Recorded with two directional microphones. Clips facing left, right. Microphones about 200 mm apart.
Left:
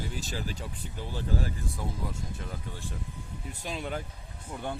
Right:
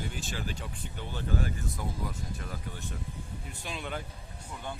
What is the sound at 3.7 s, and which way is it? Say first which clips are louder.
Speech: left 3 dB; 40° left (ahead or behind).